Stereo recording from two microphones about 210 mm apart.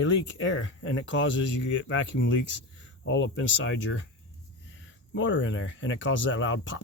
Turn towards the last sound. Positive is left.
turn(degrees=65)  # may be behind; listen again after turning